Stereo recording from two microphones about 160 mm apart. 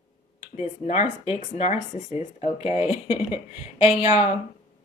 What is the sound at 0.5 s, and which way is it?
Speech, 45° left (ahead or behind).